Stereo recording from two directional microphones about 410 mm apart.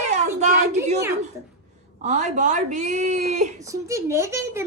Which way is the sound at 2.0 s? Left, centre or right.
Centre.